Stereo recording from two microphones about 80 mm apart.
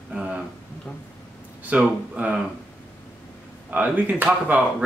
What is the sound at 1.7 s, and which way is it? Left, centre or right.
Speech, centre.